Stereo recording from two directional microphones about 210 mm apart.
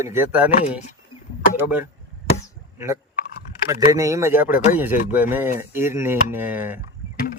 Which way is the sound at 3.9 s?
15° right (ahead or behind).